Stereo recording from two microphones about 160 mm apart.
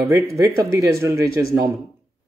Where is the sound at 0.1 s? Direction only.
20° right (ahead or behind).